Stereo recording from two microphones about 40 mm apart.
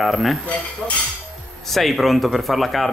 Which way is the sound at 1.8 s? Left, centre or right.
Centre.